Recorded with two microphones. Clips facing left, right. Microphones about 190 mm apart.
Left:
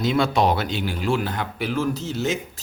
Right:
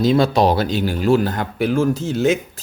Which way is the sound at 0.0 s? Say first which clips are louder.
Right 5 dB; 35° right (ahead or behind).